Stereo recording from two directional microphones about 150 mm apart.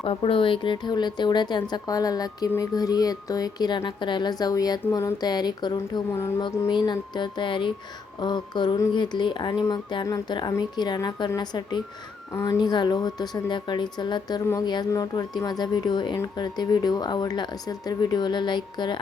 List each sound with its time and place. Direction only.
0.0 s a woman's voice: 40° left (ahead or behind)
6.7 s music: 30° left (ahead or behind)
8.2 s a woman's voice: 30° left (ahead or behind)